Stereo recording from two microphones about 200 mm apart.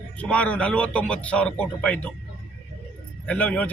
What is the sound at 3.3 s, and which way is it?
Speech, 5° left (ahead or behind).